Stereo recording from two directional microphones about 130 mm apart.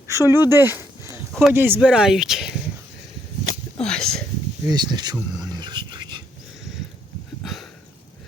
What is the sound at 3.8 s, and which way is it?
Speech, 5° left (ahead or behind).